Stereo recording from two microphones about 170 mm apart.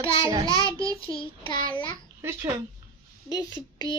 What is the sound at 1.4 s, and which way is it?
Speech, 30° left (ahead or behind).